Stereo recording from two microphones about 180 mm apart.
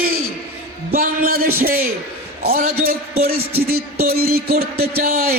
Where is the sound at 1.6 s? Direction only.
55° right (ahead or behind).